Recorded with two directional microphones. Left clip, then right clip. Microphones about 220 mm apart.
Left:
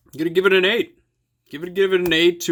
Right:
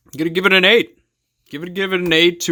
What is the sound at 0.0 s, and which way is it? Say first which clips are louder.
Speech: right 1 dB; 30° right (ahead or behind).